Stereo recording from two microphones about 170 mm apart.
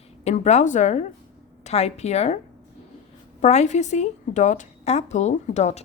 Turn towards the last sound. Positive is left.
turn(degrees=40)  # may be behind; listen again after turning